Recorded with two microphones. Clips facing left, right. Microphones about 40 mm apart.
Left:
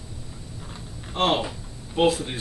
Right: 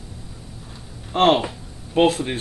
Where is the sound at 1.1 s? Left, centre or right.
Right.